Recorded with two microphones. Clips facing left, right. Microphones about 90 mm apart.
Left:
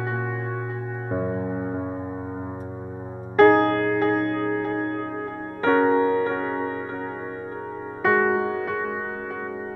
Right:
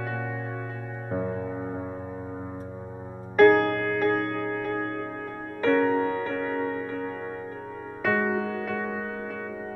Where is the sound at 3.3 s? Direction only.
25° left (ahead or behind).